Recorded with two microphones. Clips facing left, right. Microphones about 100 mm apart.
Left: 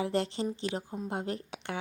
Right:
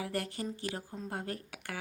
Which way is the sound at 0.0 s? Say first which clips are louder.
Left 6 dB; 25° left (ahead or behind).